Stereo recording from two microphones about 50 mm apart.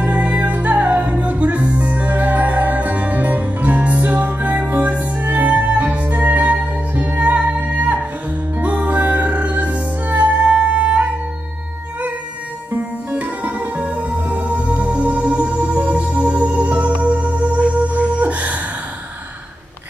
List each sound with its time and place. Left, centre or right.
0.1 s music: right
13.1 s music: right